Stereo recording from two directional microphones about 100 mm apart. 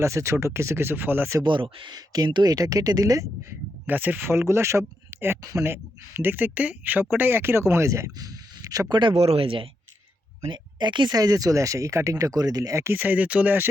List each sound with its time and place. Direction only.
0.0 s speech: 30° right (ahead or behind)
1.4 s speech: 55° right (ahead or behind); by 3.2 s 35° right (ahead or behind)
3.8 s speech: 15° right (ahead or behind); by 8.9 s 35° right (ahead or behind)
8.9 s speech: 50° right (ahead or behind)
9.1 s speech: 85° right; by 9.6 s 65° right (ahead or behind)
10.5 s speech: 50° right (ahead or behind); by 13.7 s 15° right (ahead or behind)